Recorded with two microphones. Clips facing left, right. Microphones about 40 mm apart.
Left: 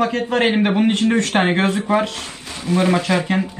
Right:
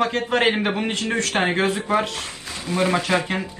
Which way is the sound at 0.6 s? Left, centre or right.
Centre.